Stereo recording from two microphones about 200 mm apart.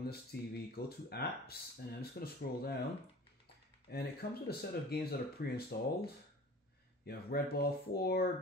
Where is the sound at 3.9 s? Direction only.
55° left (ahead or behind).